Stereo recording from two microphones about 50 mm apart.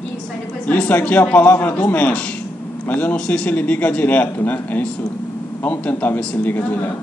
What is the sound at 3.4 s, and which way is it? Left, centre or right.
Speech, left.